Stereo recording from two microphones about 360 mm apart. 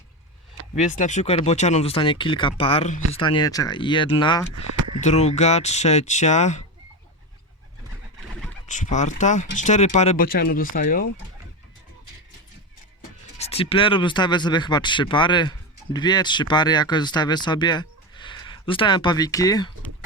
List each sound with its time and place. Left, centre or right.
0.8 s speech: left
8.6 s speech: centre
13.4 s speech: centre